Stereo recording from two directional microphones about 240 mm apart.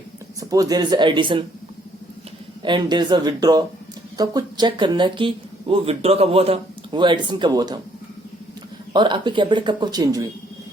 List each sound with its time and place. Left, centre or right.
0.3 s speech: centre
2.6 s speech: centre
8.9 s speech: centre